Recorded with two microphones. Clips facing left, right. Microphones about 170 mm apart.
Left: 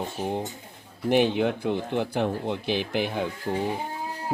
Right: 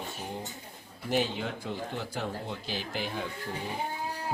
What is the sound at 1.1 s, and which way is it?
Speech, 60° left (ahead or behind).